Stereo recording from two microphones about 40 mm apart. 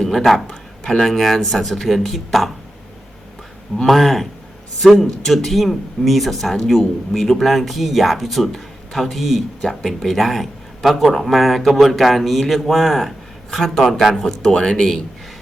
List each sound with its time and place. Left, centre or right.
0.0 s a man's voice: centre
3.8 s speech: centre
14.5 s speech: centre